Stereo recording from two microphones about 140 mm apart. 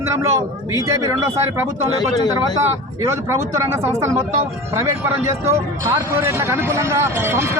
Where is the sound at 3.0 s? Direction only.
20° right (ahead or behind).